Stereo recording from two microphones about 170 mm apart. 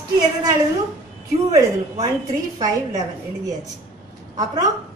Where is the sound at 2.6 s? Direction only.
20° right (ahead or behind).